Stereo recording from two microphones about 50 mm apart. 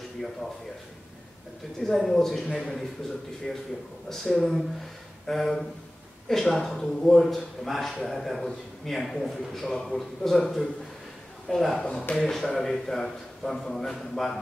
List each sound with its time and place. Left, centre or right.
1.8 s speech: centre
3.4 s a man's voice: centre
4.1 s a man's voice: centre
11.8 s a man's voice: centre